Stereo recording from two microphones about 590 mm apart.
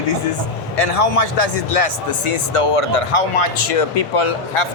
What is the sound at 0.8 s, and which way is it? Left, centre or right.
Speech, left.